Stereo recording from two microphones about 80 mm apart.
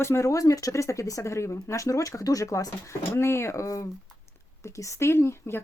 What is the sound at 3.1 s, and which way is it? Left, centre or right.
Speech, left.